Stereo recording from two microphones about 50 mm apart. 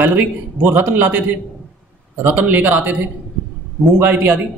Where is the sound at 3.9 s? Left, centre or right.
Right.